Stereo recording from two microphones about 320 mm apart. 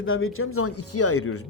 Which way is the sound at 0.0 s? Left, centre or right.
Left.